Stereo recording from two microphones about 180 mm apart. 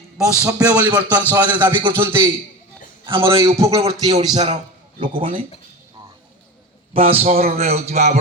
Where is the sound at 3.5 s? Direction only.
35° right (ahead or behind).